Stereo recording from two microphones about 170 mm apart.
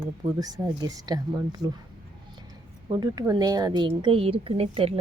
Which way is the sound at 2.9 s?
20° right (ahead or behind).